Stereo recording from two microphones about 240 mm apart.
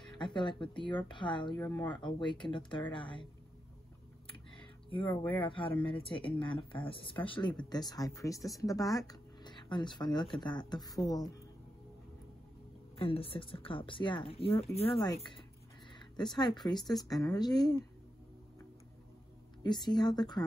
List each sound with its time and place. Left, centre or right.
0.2 s speech: centre
5.4 s speech: left
12.9 s speech: left
19.9 s speech: centre